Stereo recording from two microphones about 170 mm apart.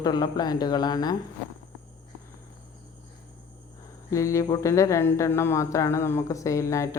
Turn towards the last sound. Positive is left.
turn(degrees=20)  # may be behind; listen again after turning